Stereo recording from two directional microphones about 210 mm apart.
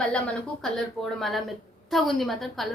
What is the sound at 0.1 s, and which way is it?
A woman's voice, 5° left (ahead or behind).